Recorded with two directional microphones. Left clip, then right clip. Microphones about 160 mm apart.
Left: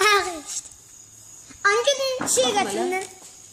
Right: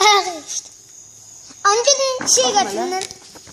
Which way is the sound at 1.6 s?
25° left (ahead or behind).